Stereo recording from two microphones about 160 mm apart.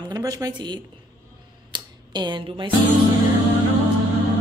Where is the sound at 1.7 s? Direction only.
30° right (ahead or behind).